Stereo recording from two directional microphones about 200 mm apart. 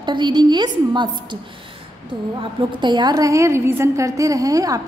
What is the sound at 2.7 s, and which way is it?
A woman's voice, 20° right (ahead or behind).